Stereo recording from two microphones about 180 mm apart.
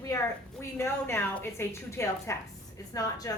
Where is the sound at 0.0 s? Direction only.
15° left (ahead or behind).